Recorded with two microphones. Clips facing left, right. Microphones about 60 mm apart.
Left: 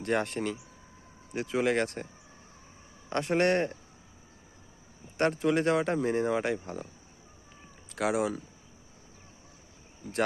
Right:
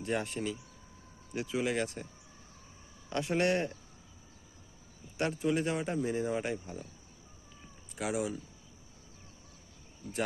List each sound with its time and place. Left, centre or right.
0.0 s speech: left
3.1 s speech: left
5.1 s speech: left
7.9 s speech: left